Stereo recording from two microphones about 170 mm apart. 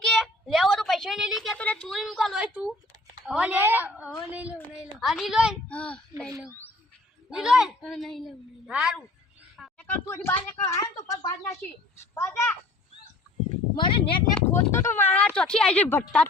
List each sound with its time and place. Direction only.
0.0 s a sound: centre (ahead or behind)
2.0 s a woman's voice: centre (ahead or behind)
5.6 s a woman's voice: 5° left (ahead or behind)
9.8 s speech: 10° left (ahead or behind)
13.7 s speech: 30° left (ahead or behind)
14.5 s a woman's voice: 15° left (ahead or behind)